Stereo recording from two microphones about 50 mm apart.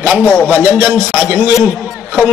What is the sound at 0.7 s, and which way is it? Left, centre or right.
Speech, right.